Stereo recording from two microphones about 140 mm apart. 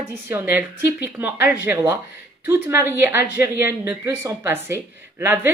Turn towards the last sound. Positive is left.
turn(degrees=-15)  # may be behind; listen again after turning